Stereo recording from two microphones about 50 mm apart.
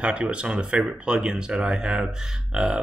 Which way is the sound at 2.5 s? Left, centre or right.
Centre.